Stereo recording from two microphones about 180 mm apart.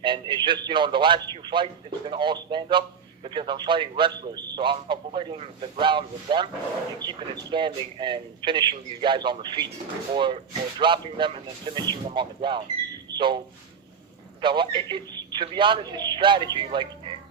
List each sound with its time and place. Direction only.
0.0 s a man's voice: 25° right (ahead or behind)
13.1 s a sound: 25° right (ahead or behind)
14.4 s a man's voice: 25° right (ahead or behind)